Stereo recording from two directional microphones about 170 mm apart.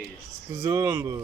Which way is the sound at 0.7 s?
15° right (ahead or behind).